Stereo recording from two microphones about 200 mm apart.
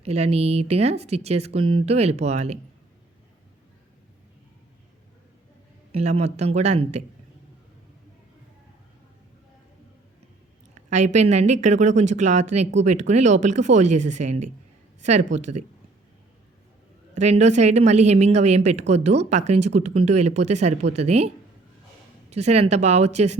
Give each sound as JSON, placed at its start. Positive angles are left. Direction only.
{"t": 0.0, "sound": "a woman's voice", "side_deg": -30}
{"t": 5.9, "sound": "a woman's voice", "side_deg": -30}
{"t": 10.8, "sound": "a woman's voice", "side_deg": -35}
{"t": 17.2, "sound": "a woman's voice", "side_deg": -35}